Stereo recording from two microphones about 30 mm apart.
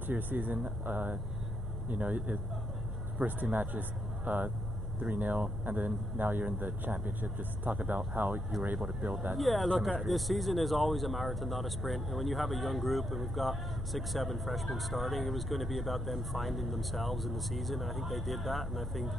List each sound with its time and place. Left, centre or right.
0.0 s speech: right
0.8 s speech: right
1.9 s speech: right
3.2 s speech: right
4.3 s speech: right
6.1 s speech: right
8.5 s speech: centre